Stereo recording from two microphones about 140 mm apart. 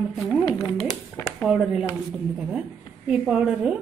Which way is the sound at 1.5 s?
5° right (ahead or behind).